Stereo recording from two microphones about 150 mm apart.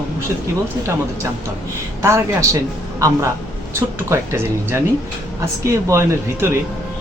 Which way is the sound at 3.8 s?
15° right (ahead or behind).